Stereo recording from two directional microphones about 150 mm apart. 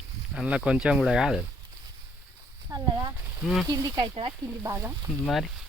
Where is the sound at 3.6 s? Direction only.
30° right (ahead or behind).